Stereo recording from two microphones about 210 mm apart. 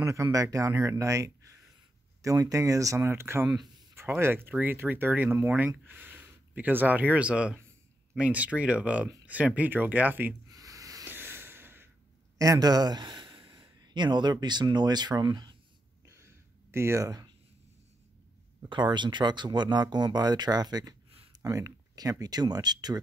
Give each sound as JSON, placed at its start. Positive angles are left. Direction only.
{"t": 0.0, "sound": "a man's voice", "side_deg": -15}
{"t": 9.6, "sound": "a sound", "side_deg": -10}
{"t": 12.4, "sound": "speech", "side_deg": -15}
{"t": 16.7, "sound": "speech", "side_deg": -15}
{"t": 18.6, "sound": "speech", "side_deg": -20}